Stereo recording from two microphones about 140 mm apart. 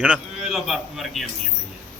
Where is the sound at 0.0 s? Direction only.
5° right (ahead or behind).